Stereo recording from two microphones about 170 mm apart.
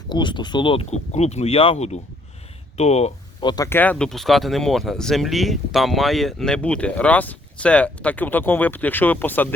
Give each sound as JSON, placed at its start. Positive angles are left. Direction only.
{"t": 0.1, "sound": "speech", "side_deg": 25}
{"t": 3.4, "sound": "speech", "side_deg": 25}
{"t": 3.7, "sound": "speech", "side_deg": 10}